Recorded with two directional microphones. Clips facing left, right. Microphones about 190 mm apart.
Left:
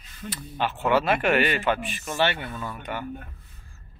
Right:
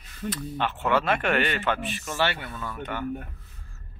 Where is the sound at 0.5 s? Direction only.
10° left (ahead or behind).